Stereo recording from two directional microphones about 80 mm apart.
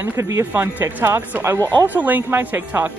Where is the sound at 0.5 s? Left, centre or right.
Right.